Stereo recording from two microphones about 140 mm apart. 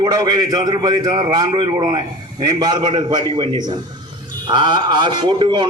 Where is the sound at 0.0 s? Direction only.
30° right (ahead or behind).